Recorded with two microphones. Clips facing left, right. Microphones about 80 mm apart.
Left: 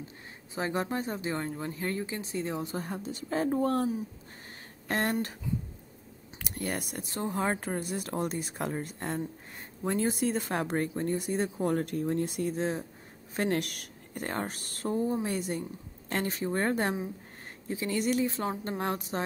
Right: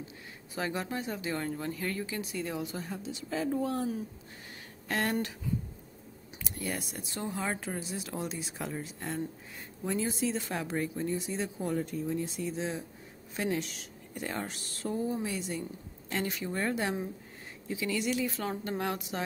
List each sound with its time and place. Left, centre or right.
0.6 s speech: left
4.8 s speech: left
6.3 s speech: left
11.6 s speech: left
13.4 s speech: left
18.2 s speech: left